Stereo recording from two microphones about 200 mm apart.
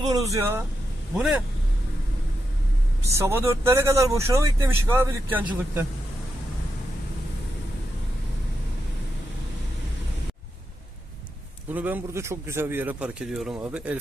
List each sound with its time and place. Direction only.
0.1 s speech: 15° right (ahead or behind)
1.1 s speech: centre (ahead or behind)
3.1 s speech: 15° right (ahead or behind)
11.7 s speech: 10° right (ahead or behind)